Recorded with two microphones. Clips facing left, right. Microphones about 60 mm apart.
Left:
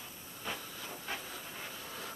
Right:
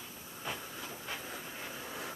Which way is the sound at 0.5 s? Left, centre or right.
Right.